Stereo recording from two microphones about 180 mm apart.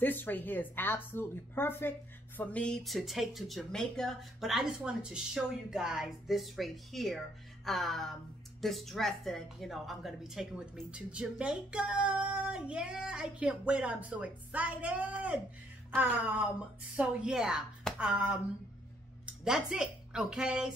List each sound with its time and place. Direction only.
0.0 s a woman's voice: 10° left (ahead or behind)